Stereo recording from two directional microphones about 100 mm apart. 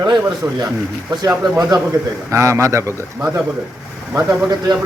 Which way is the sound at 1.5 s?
40° right (ahead or behind).